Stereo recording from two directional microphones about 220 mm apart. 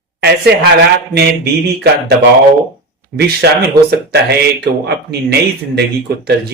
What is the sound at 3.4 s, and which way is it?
Speech, 50° right (ahead or behind).